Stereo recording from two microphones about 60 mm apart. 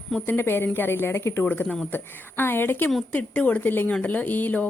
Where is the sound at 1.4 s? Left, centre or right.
Left.